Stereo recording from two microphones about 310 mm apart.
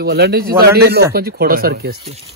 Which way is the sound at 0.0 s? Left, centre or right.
Right.